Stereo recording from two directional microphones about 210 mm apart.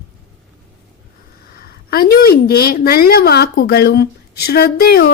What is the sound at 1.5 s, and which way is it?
A woman's voice, 45° left (ahead or behind).